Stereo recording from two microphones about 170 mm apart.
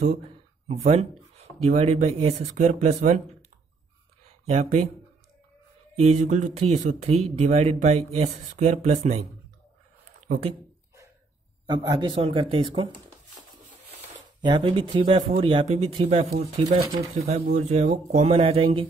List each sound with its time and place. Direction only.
0.7 s speech: 35° right (ahead or behind)
4.5 s speech: 45° right (ahead or behind)
5.9 s speech: 40° right (ahead or behind)
10.2 s speech: 45° right (ahead or behind)
11.6 s a man's voice: 25° right (ahead or behind)
14.4 s a man's voice: 25° right (ahead or behind)